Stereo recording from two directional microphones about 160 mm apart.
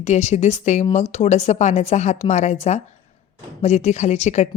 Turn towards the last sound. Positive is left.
turn(degrees=45)  # may be behind; listen again after turning